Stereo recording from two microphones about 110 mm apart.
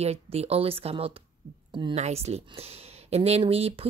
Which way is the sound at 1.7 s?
45° right (ahead or behind).